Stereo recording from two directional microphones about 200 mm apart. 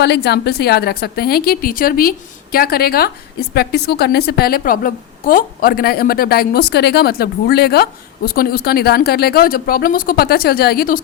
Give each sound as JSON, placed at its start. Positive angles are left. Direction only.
{"t": 0.0, "sound": "a woman's voice", "side_deg": 55}